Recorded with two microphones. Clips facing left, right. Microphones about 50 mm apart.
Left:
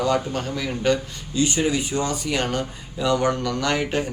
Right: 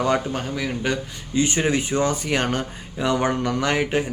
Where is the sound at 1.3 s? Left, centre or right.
Right.